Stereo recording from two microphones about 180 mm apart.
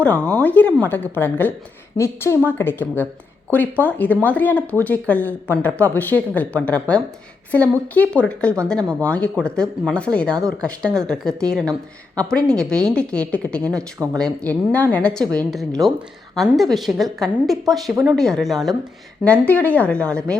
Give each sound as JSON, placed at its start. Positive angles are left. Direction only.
{"t": 0.0, "sound": "speech", "side_deg": 10}
{"t": 13.7, "sound": "speech", "side_deg": -20}
{"t": 14.2, "sound": "speech", "side_deg": 5}